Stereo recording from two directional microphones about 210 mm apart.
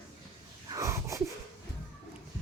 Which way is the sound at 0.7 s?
15° right (ahead or behind).